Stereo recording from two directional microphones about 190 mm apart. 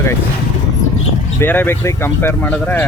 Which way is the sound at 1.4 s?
10° left (ahead or behind).